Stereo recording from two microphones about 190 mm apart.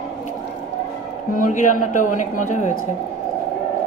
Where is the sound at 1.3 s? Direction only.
45° left (ahead or behind).